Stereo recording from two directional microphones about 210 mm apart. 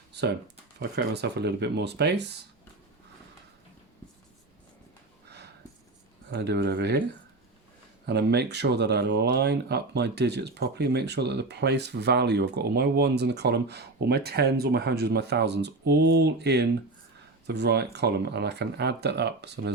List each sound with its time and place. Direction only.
0.1 s a sound: 55° right (ahead or behind)
0.8 s speech: 55° right (ahead or behind)
6.3 s speech: 55° right (ahead or behind)
8.0 s speech: 50° right (ahead or behind)